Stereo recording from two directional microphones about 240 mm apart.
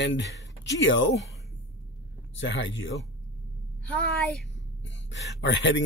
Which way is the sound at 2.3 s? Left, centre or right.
Left.